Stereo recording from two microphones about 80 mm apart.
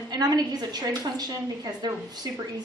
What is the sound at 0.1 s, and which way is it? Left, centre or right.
A woman's voice, right.